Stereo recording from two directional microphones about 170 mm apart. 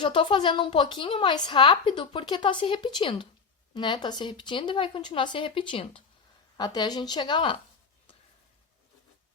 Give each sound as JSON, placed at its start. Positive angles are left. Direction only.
{"t": 0.0, "sound": "a woman's voice", "side_deg": 30}